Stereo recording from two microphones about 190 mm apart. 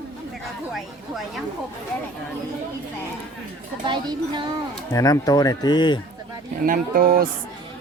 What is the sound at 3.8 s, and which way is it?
Speech, 25° right (ahead or behind).